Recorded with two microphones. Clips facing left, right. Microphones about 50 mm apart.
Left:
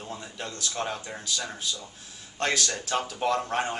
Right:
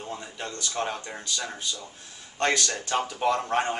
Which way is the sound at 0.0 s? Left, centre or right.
Centre.